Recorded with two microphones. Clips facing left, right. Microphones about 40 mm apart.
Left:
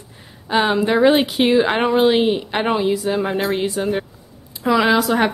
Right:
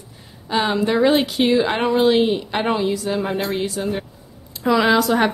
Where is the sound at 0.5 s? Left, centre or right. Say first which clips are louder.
Left 2 dB; centre.